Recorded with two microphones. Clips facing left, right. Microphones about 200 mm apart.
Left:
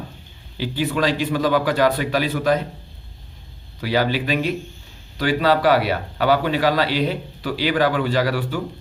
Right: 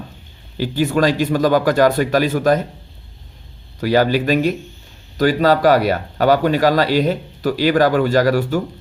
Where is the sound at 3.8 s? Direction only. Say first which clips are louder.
Right 5 dB; 45° right (ahead or behind).